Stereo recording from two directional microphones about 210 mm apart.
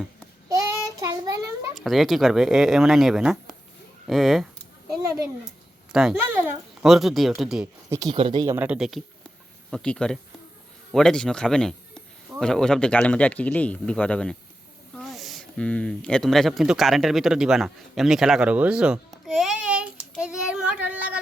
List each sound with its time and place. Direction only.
0.4 s child singing: 15° right (ahead or behind)
1.7 s speech: centre (ahead or behind)
5.9 s speech: 5° right (ahead or behind)
7.9 s speech: 15° right (ahead or behind)
8.5 s speech: 5° right (ahead or behind)
14.9 s a sound: centre (ahead or behind)